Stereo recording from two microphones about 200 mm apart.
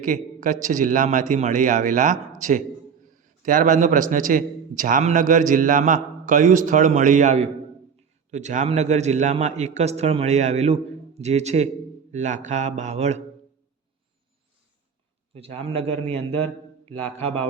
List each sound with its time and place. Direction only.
0.0 s a man's voice: 40° right (ahead or behind)
15.4 s a man's voice: 30° right (ahead or behind)